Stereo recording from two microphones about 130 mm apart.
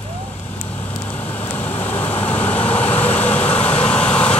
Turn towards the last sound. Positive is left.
turn(degrees=10)  # may be behind; listen again after turning